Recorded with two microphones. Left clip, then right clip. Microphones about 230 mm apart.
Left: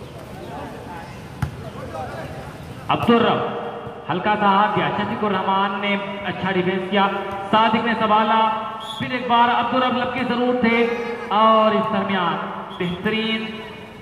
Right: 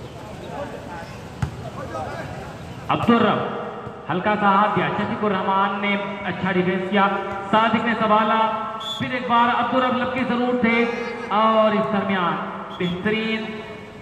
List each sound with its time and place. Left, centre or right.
2.9 s a man's voice: left